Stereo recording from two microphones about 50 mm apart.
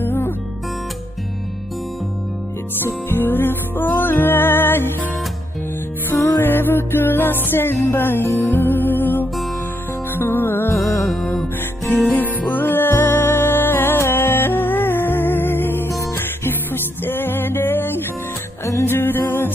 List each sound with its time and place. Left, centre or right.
0.0 s music: left
2.8 s music: left
6.4 s music: left
11.9 s music: left